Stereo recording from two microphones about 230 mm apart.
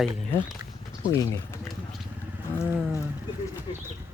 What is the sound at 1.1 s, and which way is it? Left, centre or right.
Speech, centre.